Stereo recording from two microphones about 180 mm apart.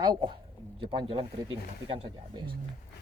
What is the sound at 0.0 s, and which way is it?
Speech, 25° right (ahead or behind).